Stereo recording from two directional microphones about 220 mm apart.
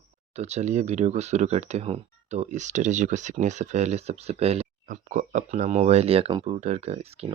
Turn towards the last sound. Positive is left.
turn(degrees=-30)  # may be behind; listen again after turning